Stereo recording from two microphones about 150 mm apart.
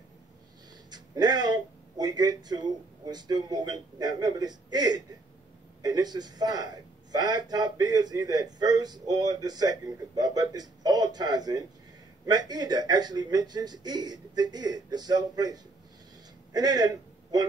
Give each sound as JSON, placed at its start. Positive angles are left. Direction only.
{"t": 0.8, "sound": "a man's voice", "side_deg": -25}